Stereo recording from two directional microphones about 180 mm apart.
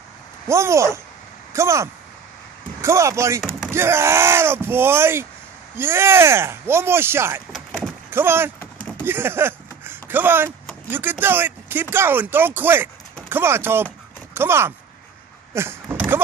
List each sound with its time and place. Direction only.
0.5 s speech: 15° right (ahead or behind)
7.5 s a sound: centre (ahead or behind)
8.1 s speech: 10° right (ahead or behind)
8.5 s vehicle: 5° left (ahead or behind)
9.0 s a sound: 10° right (ahead or behind)
10.9 s speech: 10° right (ahead or behind)
15.5 s vehicle: 15° right (ahead or behind)